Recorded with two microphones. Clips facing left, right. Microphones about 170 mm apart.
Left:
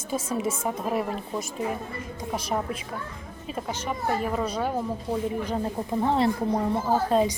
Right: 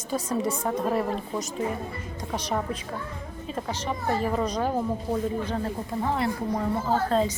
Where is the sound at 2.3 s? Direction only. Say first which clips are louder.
Even; 10° left (ahead or behind).